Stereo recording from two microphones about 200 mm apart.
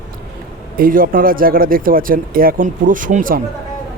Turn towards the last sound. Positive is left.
turn(degrees=-40)  # may be behind; listen again after turning